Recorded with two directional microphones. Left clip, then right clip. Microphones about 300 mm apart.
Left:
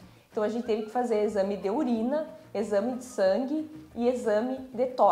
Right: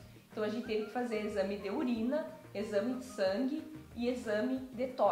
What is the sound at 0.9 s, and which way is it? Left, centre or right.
A woman's voice, left.